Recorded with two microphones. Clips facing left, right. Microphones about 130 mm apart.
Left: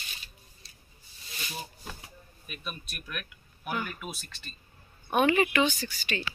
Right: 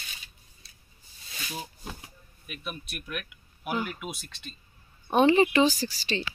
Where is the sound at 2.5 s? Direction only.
15° right (ahead or behind); by 6.2 s 35° right (ahead or behind).